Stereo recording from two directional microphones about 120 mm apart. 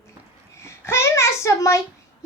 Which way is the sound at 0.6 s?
20° left (ahead or behind).